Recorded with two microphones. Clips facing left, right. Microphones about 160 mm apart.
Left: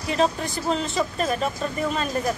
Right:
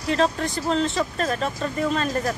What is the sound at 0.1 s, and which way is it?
Speech, 5° left (ahead or behind).